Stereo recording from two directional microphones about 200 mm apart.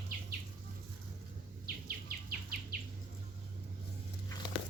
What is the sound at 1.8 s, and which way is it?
Insect, 50° right (ahead or behind).